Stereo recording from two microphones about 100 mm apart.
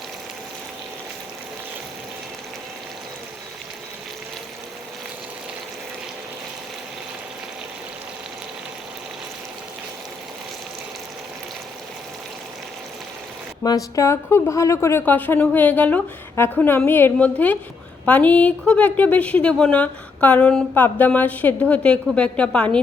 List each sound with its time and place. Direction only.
13.7 s a woman's voice: 35° left (ahead or behind); by 22.8 s 10° left (ahead or behind)